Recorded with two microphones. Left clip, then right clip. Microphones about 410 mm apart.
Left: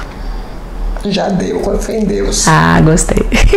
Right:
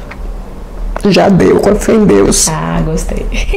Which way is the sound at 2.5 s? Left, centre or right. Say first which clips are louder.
Left 7 dB; left.